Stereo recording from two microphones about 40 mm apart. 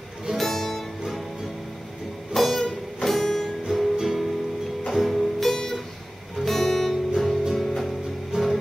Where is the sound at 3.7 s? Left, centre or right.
Centre.